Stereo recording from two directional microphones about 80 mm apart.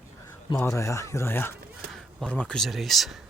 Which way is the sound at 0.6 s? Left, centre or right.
Left.